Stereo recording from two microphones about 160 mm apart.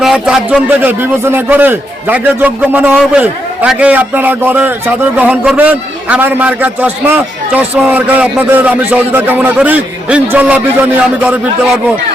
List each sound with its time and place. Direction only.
0.0 s a man's voice: 5° right (ahead or behind)